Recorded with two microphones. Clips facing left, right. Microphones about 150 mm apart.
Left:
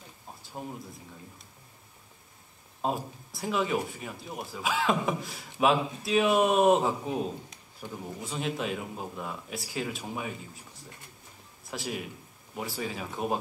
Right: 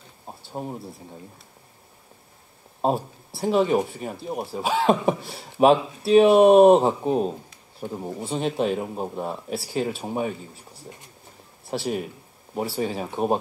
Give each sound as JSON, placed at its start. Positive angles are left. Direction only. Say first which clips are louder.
{"t": 0.3, "sound": "a sound", "louder": "right 7 dB", "side_deg": -35}
{"t": 2.8, "sound": "a man's voice", "louder": "right 7 dB", "side_deg": -30}
{"t": 11.6, "sound": "a man's voice", "louder": "right 8 dB", "side_deg": -30}